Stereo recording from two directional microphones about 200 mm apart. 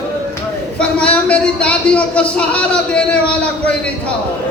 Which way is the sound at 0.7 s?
5° left (ahead or behind).